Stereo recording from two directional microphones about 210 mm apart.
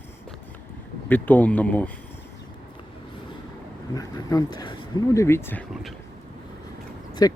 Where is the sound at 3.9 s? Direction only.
20° left (ahead or behind).